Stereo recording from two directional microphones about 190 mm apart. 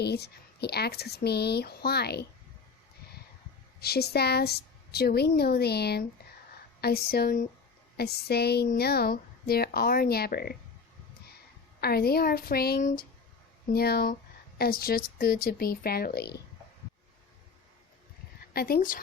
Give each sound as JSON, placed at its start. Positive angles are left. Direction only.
{"t": 0.0, "sound": "a woman's voice", "side_deg": 60}
{"t": 3.8, "sound": "a woman's voice", "side_deg": 55}
{"t": 11.8, "sound": "a woman's voice", "side_deg": 55}
{"t": 18.5, "sound": "a woman's voice", "side_deg": 50}